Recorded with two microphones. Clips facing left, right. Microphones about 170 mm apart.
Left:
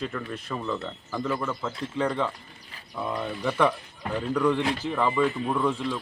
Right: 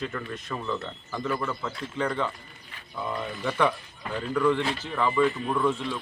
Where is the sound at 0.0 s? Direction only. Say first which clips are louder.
Left 1 dB; centre (ahead or behind).